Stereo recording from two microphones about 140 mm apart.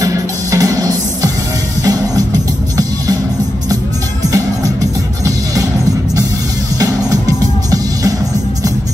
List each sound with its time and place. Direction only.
0.0 s music: 25° right (ahead or behind)
5.2 s music: 25° right (ahead or behind)